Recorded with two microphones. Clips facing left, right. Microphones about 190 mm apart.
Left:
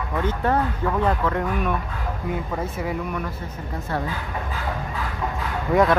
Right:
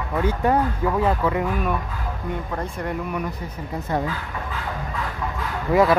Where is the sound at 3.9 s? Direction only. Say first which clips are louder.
Right 3 dB; 15° right (ahead or behind).